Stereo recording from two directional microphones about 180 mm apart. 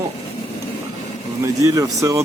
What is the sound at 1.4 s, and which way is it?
Speech, 20° right (ahead or behind).